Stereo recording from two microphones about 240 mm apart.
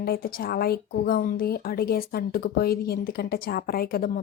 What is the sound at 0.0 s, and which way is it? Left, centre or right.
A woman's voice, left.